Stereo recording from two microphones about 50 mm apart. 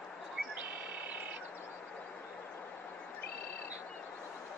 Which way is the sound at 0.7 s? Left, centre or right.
Right.